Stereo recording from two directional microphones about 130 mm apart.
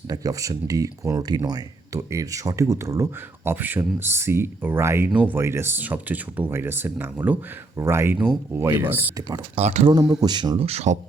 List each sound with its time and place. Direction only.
0.1 s speech: 25° right (ahead or behind)
9.6 s speech: 55° right (ahead or behind)
9.9 s speech: 30° right (ahead or behind)
10.7 s speech: 55° right (ahead or behind)